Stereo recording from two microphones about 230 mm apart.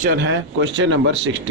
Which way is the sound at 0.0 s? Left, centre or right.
Right.